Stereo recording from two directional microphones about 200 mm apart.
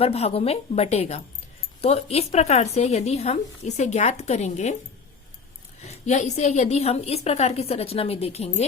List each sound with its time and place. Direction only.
0.0 s a woman's voice: 30° left (ahead or behind)
5.8 s a woman's voice: 35° left (ahead or behind)